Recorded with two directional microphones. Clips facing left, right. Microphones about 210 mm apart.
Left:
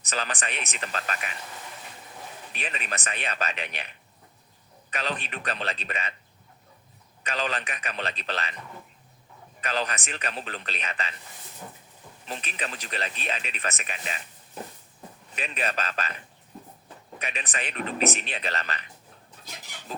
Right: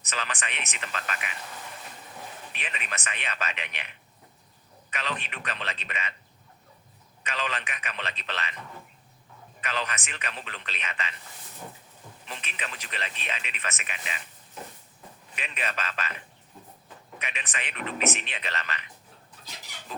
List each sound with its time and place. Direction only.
0.0 s speech: 35° left (ahead or behind)
2.5 s speech: 40° left (ahead or behind)
7.3 s speech: 35° left (ahead or behind)
9.6 s speech: 35° left (ahead or behind)
12.3 s speech: 40° left (ahead or behind)
15.4 s speech: 35° left (ahead or behind)
17.2 s speech: 35° left (ahead or behind)
19.9 s rub: 35° left (ahead or behind)